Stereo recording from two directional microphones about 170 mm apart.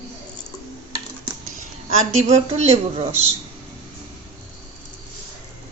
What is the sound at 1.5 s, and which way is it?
A woman's voice, 55° right (ahead or behind).